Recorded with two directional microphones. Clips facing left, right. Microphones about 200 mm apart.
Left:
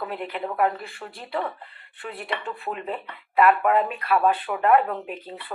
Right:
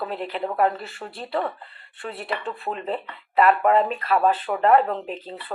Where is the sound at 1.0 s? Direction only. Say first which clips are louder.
Right 2 dB; 15° right (ahead or behind).